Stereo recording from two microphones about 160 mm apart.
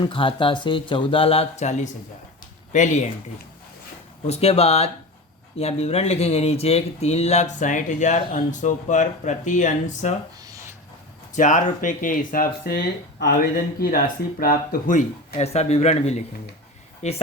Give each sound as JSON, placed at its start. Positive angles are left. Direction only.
{"t": 0.0, "sound": "speech", "side_deg": 35}
{"t": 4.3, "sound": "speech", "side_deg": 40}
{"t": 11.3, "sound": "speech", "side_deg": 55}
{"t": 13.7, "sound": "speech", "side_deg": 70}